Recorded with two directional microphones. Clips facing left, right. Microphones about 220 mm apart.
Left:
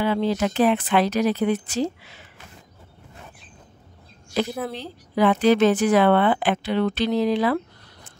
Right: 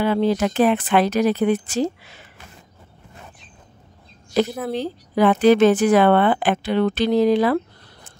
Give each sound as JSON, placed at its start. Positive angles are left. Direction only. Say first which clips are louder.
{"t": 0.0, "sound": "speech", "louder": "right 3 dB", "side_deg": -50}
{"t": 4.7, "sound": "speech", "louder": "right 5 dB", "side_deg": -45}